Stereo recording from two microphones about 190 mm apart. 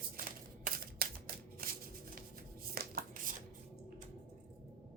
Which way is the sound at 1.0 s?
50° right (ahead or behind).